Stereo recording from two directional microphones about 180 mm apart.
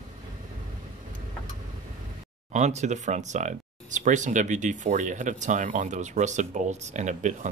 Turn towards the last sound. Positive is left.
turn(degrees=-40)  # may be behind; listen again after turning